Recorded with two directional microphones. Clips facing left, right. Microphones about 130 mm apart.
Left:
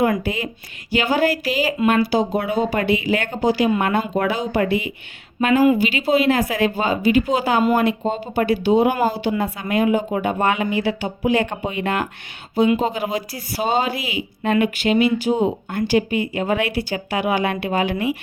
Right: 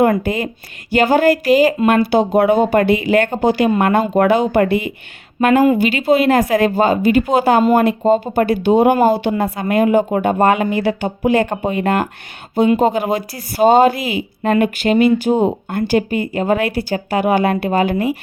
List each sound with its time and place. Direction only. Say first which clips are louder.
0.0 s speech: right 5 dB; 50° right (ahead or behind)
9.3 s speech: right 4 dB; 45° right (ahead or behind)